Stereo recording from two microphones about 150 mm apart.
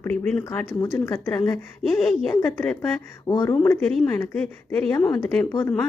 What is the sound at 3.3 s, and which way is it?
Speech, 25° left (ahead or behind).